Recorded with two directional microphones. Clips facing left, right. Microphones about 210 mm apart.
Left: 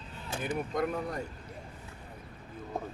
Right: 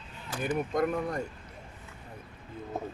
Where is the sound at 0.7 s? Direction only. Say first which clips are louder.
Right 3 dB; 50° right (ahead or behind).